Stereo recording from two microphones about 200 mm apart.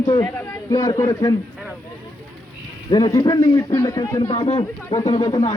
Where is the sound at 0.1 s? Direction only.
15° left (ahead or behind).